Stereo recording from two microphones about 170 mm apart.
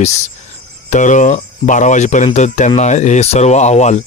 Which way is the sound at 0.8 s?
45° left (ahead or behind).